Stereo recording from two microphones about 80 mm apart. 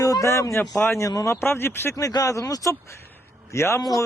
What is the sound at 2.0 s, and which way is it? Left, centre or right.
Speech, left.